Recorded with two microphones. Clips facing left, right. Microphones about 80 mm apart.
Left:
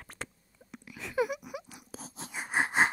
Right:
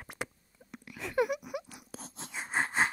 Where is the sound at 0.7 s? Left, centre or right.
Centre.